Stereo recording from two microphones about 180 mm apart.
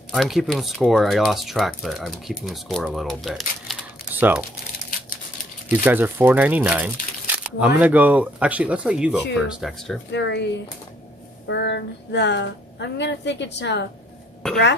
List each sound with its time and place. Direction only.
0.1 s speech: centre (ahead or behind)
5.7 s speech: 10° right (ahead or behind)
10.1 s speech: 70° left (ahead or behind)
14.4 s speech: 5° left (ahead or behind)